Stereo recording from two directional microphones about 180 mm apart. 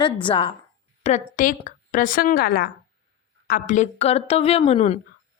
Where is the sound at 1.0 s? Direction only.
45° left (ahead or behind).